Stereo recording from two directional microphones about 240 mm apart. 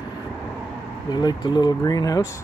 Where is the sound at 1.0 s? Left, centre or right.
Centre.